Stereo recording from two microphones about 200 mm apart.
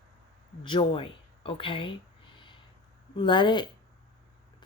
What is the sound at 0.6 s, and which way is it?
Speech, 25° left (ahead or behind).